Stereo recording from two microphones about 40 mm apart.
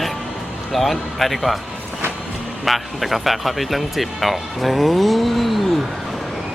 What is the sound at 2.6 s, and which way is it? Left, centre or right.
Speech, centre.